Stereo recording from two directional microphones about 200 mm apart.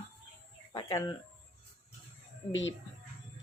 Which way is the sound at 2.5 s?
70° left (ahead or behind).